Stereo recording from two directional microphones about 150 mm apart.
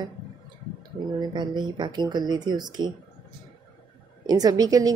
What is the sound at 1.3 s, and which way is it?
A woman's voice, 30° right (ahead or behind).